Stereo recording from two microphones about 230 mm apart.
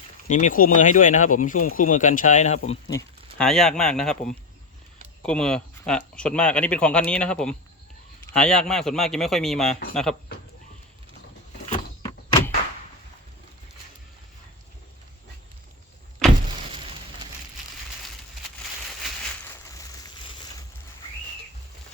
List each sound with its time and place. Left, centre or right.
0.3 s speech: left
3.3 s speech: centre
11.6 s power windows: left